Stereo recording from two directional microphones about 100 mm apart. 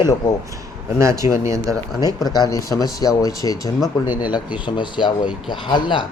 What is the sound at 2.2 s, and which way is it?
Speech, 40° left (ahead or behind).